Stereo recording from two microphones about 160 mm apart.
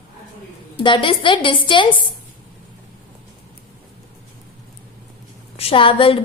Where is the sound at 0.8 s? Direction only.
30° left (ahead or behind).